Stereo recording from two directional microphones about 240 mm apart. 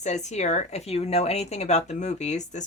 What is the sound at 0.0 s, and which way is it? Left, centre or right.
Speech, left.